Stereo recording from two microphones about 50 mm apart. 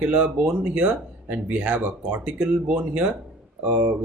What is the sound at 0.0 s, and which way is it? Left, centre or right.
Speech, right.